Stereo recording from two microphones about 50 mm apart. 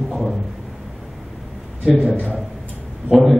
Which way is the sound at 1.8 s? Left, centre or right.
Centre.